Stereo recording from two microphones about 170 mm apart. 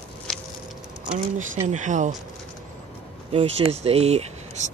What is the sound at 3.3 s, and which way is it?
Speech, 40° right (ahead or behind).